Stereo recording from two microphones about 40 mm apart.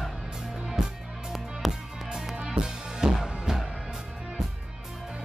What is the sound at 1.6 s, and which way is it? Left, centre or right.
Music, centre.